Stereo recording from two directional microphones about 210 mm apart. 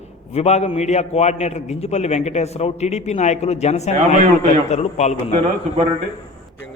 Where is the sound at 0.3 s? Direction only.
30° left (ahead or behind).